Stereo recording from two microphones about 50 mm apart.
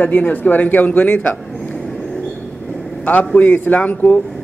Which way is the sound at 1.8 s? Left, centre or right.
Centre.